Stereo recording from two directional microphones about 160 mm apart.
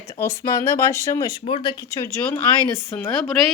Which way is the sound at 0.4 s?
25° left (ahead or behind).